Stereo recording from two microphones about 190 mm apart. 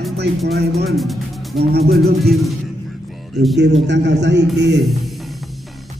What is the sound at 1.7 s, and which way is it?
Speech, 55° right (ahead or behind).